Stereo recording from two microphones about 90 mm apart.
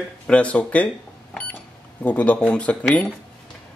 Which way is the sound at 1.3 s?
15° left (ahead or behind).